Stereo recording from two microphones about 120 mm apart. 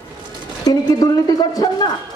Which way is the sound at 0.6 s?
30° left (ahead or behind).